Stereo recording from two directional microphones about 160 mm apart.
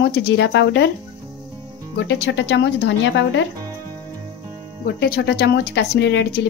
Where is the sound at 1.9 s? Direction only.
90° left.